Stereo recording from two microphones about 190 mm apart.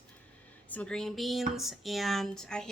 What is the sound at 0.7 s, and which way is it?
Speech, 5° left (ahead or behind).